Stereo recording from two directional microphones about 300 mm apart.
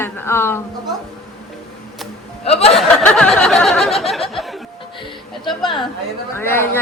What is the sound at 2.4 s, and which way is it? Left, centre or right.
Speech, centre.